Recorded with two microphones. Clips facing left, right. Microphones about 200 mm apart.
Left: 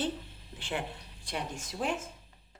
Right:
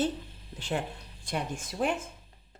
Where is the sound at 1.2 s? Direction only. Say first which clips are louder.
Right 4 dB; 50° right (ahead or behind).